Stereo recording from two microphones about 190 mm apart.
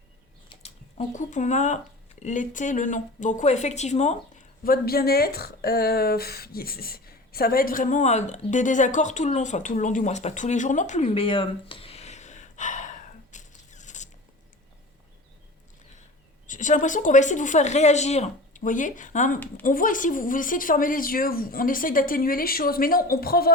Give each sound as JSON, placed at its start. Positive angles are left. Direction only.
{"t": 0.5, "sound": "speech", "side_deg": 35}
{"t": 4.6, "sound": "speech", "side_deg": 50}
{"t": 16.5, "sound": "a woman's voice", "side_deg": 40}